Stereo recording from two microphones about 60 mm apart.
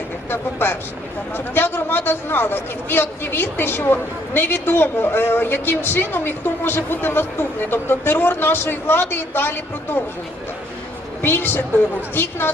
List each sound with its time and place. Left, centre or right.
0.3 s a woman's voice: left
11.2 s a woman's voice: left